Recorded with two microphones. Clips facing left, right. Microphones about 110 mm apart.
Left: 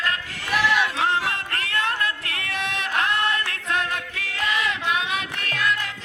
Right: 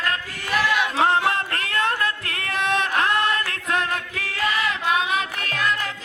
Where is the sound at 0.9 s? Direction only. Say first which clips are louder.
Right 4 dB; 40° right (ahead or behind).